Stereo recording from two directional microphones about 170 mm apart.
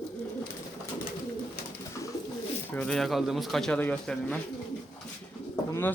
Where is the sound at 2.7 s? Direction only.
5° left (ahead or behind).